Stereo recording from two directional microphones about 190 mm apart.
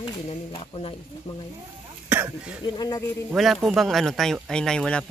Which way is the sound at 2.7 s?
20° left (ahead or behind).